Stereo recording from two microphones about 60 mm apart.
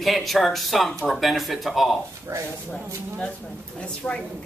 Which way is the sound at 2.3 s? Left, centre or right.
Right.